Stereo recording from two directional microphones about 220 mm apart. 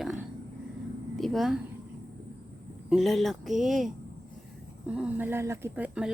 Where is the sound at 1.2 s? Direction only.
Centre (ahead or behind).